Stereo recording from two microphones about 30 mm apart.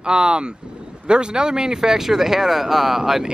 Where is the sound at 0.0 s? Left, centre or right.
Right; by 3.0 s centre.